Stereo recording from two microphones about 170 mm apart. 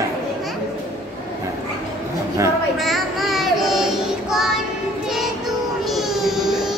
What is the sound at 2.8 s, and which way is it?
Child singing, centre (ahead or behind).